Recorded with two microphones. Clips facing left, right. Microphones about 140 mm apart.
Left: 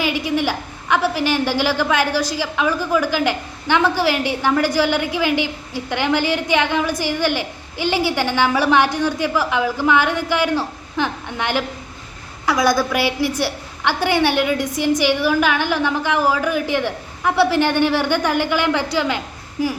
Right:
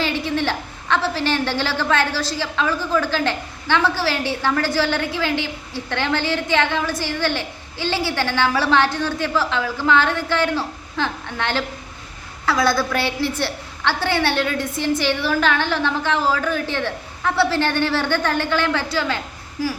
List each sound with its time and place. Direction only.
0.0 s a woman's voice: 10° left (ahead or behind)